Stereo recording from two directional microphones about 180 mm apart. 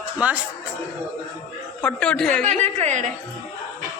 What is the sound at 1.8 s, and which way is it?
Speech, 5° left (ahead or behind).